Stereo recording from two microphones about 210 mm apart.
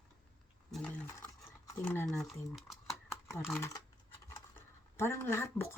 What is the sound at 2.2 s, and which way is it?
Speech, centre (ahead or behind).